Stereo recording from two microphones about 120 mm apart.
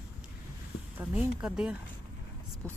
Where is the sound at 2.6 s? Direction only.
10° left (ahead or behind).